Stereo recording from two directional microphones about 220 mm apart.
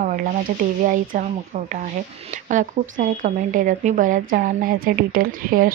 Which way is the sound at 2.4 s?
35° right (ahead or behind).